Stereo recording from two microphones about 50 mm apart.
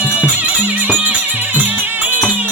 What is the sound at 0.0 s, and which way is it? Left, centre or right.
Music, right.